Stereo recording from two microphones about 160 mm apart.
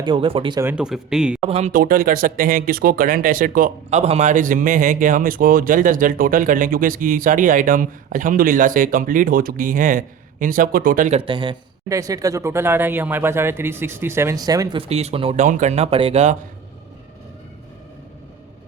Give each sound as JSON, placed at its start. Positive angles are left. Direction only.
{"t": 0.0, "sound": "speech", "side_deg": -35}
{"t": 0.6, "sound": "a man's voice", "side_deg": -10}
{"t": 1.5, "sound": "speech", "side_deg": -40}
{"t": 1.7, "sound": "speech", "side_deg": -60}
{"t": 11.1, "sound": "speech", "side_deg": -35}
{"t": 11.9, "sound": "speech", "side_deg": -20}
{"t": 14.8, "sound": "speech", "side_deg": -40}